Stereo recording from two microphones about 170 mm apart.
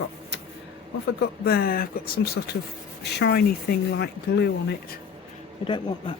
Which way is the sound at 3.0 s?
80° left.